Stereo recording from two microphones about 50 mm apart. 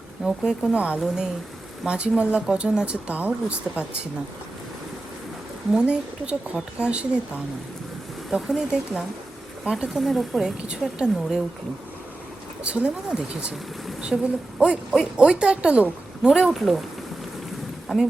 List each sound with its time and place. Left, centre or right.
0.3 s speech: centre
1.0 s speech: centre
5.8 s speech: right
8.3 s speech: centre
10.0 s speech: centre
10.7 s speech: centre
12.6 s speech: right
14.1 s speech: centre
14.6 s speech: centre
16.5 s speech: centre